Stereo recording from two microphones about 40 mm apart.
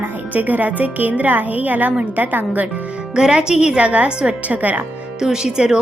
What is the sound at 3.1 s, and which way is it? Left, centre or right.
Speech, right.